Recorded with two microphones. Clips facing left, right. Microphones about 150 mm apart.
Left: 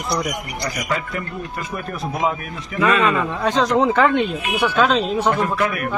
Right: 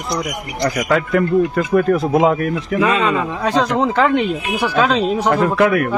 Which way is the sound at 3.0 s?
5° right (ahead or behind).